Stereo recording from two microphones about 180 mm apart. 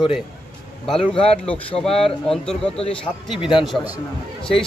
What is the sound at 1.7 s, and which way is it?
Speech, 5° left (ahead or behind).